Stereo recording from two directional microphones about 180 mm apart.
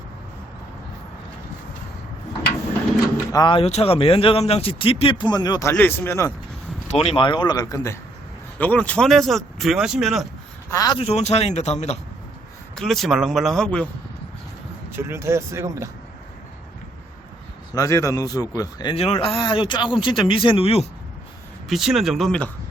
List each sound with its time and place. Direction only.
3.3 s a man's voice: 25° left (ahead or behind)
6.8 s a man's voice: 35° left (ahead or behind); by 7.9 s 20° left (ahead or behind)
8.5 s speech: 10° left (ahead or behind)
10.7 s a man's voice: 20° left (ahead or behind)
11.0 s speech: 35° left (ahead or behind)
12.7 s speech: centre (ahead or behind)
14.9 s speech: 15° right (ahead or behind)
17.7 s a man's voice: 15° left (ahead or behind); by 20.8 s 30° left (ahead or behind)
21.7 s speech: centre (ahead or behind)